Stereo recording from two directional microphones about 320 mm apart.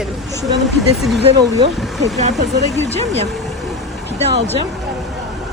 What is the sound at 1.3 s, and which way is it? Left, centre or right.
Speech, centre.